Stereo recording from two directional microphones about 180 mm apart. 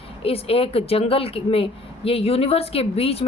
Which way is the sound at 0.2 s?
30° left (ahead or behind).